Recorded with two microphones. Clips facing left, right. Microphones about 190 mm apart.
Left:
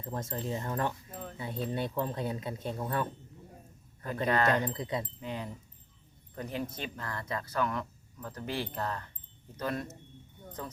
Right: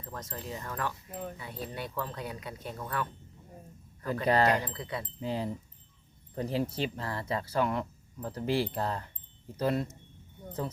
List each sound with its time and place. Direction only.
0.0 s speech: 25° left (ahead or behind)
1.1 s speech: 15° right (ahead or behind)
1.4 s speech: 25° left (ahead or behind)
4.3 s speech: 30° right (ahead or behind)
4.6 s speech: 20° left (ahead or behind)
5.2 s speech: 30° right (ahead or behind)